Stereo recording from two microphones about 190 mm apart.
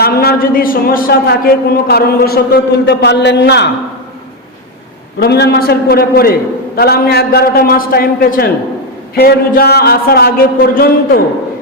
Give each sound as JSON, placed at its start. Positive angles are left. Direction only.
{"t": 0.0, "sound": "a man's voice", "side_deg": 55}
{"t": 5.2, "sound": "speech", "side_deg": 60}